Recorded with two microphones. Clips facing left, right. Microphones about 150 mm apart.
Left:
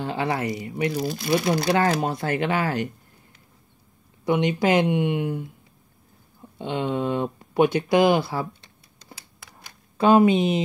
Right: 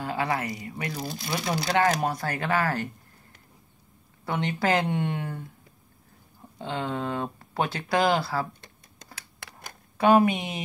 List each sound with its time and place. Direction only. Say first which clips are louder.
0.0 s speech: left 3 dB; 25° left (ahead or behind)
1.0 s speech: left 6 dB; 70° left (ahead or behind)
1.8 s speech: left 2 dB; 30° left (ahead or behind)
4.2 s speech: left 6 dB; 15° left (ahead or behind)
6.6 s speech: left 5 dB; 20° left (ahead or behind)
9.9 s speech: left 4 dB; 25° left (ahead or behind)